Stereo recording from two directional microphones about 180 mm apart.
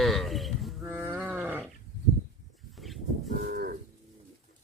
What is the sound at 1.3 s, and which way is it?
Goat, 10° right (ahead or behind).